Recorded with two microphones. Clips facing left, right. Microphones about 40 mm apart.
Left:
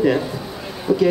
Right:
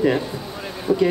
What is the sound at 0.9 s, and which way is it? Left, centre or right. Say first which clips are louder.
Speech: left 1 dB; centre.